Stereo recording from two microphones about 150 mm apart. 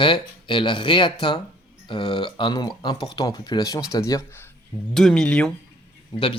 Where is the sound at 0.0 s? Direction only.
35° left (ahead or behind).